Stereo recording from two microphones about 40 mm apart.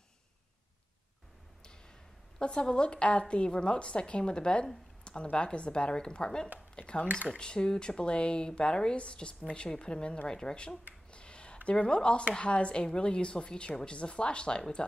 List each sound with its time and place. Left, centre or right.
2.3 s a woman's voice: left
11.1 s a sound: left
11.7 s a woman's voice: left